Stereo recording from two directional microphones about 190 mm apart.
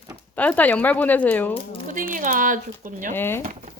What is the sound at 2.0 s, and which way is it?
Speech, 45° right (ahead or behind).